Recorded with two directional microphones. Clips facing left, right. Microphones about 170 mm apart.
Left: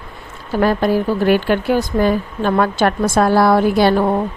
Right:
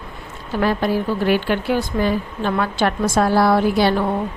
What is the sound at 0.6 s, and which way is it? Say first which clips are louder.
Speech: left 4 dB; 45° left (ahead or behind).